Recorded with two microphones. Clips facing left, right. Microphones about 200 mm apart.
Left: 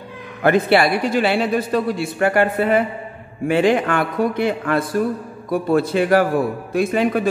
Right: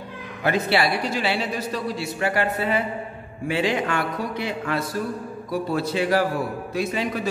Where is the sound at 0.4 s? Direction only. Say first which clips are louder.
Left 7 dB; 55° left (ahead or behind).